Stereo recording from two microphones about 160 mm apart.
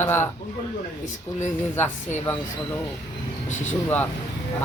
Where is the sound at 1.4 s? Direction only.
15° left (ahead or behind).